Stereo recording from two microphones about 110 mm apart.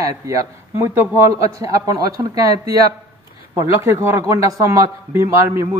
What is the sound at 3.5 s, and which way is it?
A man's voice, 30° right (ahead or behind).